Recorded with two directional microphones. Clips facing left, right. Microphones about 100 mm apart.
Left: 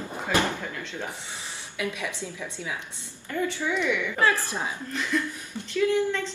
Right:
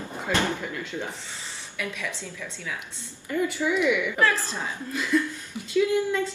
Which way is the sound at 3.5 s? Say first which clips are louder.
Right 4 dB; 10° right (ahead or behind).